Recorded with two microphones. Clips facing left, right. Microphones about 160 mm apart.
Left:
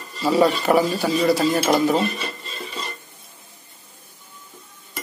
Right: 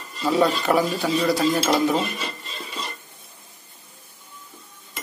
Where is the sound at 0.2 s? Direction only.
Centre (ahead or behind).